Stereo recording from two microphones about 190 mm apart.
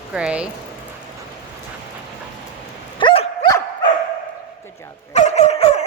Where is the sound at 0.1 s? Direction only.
5° right (ahead or behind).